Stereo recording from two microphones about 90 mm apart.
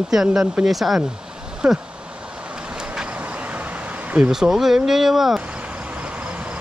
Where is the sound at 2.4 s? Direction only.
10° right (ahead or behind).